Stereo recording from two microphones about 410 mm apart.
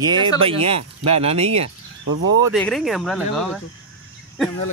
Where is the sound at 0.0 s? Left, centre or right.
Centre.